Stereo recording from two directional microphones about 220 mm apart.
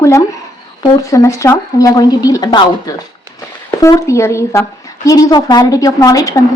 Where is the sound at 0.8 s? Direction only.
15° left (ahead or behind).